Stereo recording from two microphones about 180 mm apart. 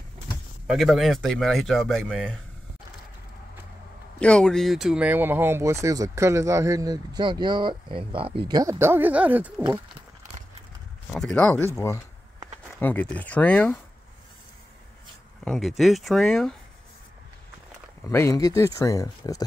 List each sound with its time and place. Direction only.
0.7 s speech: centre (ahead or behind)
4.2 s speech: 5° left (ahead or behind); by 8.4 s 30° right (ahead or behind)
8.5 s speech: 20° right (ahead or behind)
11.1 s speech: 5° left (ahead or behind)
15.4 s speech: centre (ahead or behind)
18.0 s speech: 15° left (ahead or behind)